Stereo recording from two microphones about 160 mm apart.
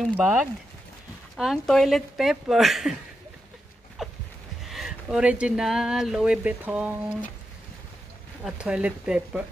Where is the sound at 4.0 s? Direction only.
Centre (ahead or behind).